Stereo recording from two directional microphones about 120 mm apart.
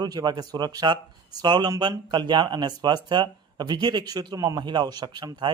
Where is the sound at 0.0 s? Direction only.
35° right (ahead or behind).